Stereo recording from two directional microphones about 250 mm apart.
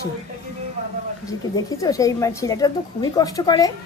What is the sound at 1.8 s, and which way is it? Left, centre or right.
Speech, centre.